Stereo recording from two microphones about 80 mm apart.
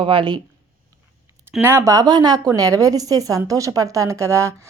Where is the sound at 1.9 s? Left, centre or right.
Right.